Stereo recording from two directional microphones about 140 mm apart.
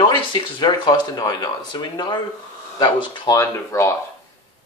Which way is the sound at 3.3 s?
20° left (ahead or behind).